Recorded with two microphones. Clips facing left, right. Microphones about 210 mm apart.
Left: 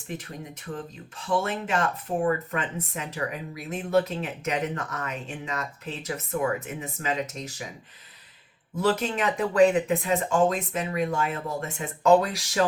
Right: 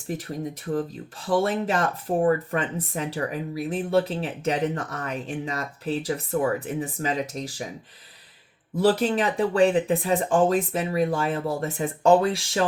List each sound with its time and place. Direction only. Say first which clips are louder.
0.1 s speech: right 6 dB; 35° right (ahead or behind)
8.8 s speech: right 4 dB; 35° right (ahead or behind)